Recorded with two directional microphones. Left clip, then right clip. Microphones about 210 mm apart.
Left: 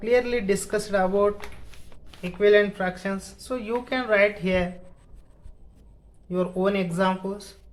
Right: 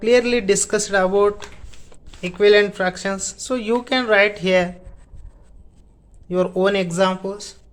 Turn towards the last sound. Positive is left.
turn(degrees=-35)  # may be behind; listen again after turning